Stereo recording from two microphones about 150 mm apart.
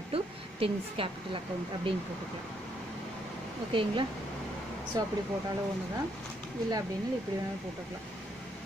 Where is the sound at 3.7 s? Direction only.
35° right (ahead or behind).